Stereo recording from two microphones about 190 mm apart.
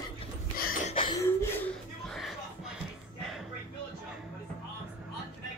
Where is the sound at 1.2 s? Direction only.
15° left (ahead or behind).